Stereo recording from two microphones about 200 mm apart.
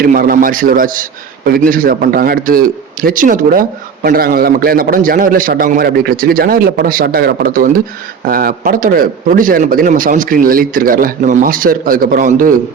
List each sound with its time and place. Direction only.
0.0 s a man's voice: 45° right (ahead or behind)